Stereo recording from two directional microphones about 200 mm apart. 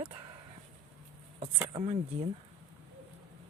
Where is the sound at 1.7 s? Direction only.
25° right (ahead or behind).